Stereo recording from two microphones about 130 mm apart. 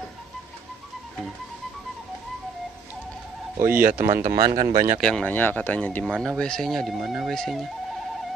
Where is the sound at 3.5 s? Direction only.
15° right (ahead or behind).